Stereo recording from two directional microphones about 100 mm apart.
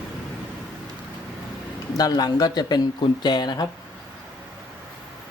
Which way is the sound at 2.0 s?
40° left (ahead or behind).